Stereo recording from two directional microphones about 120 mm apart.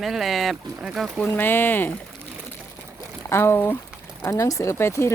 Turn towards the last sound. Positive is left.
turn(degrees=20)  # may be behind; listen again after turning